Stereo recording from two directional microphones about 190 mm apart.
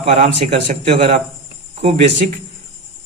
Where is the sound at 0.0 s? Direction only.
35° right (ahead or behind).